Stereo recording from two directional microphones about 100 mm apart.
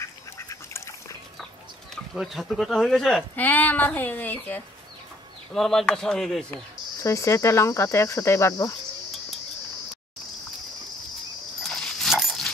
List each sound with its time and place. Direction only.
0.0 s duck: 30° left (ahead or behind)
2.1 s speech: centre (ahead or behind)
3.3 s speech: 20° left (ahead or behind)
5.5 s speech: 5° left (ahead or behind)
7.0 s speech: 30° left (ahead or behind)
11.6 s dog: 5° left (ahead or behind)